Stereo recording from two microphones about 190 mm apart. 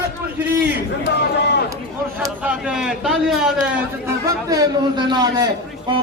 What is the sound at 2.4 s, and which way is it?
A man's voice, 5° right (ahead or behind).